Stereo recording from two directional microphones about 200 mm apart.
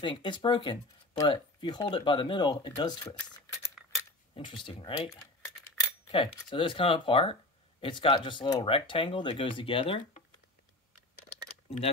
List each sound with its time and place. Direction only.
0.0 s speech: 25° left (ahead or behind)
4.6 s speech: 25° left (ahead or behind)
5.1 s typing: 15° left (ahead or behind)
6.1 s speech: 25° left (ahead or behind)